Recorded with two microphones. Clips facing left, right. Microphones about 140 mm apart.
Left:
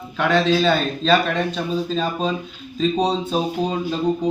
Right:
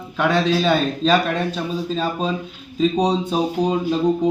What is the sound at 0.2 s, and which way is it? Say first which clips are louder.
A man's voice: left 1 dB; 10° right (ahead or behind).